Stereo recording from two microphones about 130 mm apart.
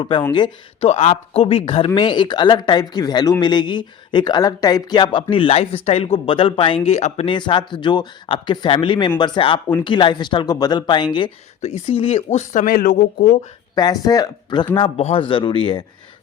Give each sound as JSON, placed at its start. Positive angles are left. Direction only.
{"t": 0.3, "sound": "speech", "side_deg": 35}
{"t": 0.9, "sound": "speech", "side_deg": 65}
{"t": 1.1, "sound": "speech", "side_deg": 45}
{"t": 7.3, "sound": "speech", "side_deg": 35}
{"t": 11.6, "sound": "speech", "side_deg": 55}
{"t": 13.7, "sound": "speech", "side_deg": 30}
{"t": 14.9, "sound": "speech", "side_deg": 50}